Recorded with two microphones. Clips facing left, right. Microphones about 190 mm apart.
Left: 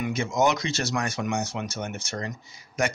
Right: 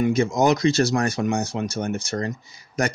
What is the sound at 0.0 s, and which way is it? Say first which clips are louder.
Speech: right 5 dB; 35° right (ahead or behind).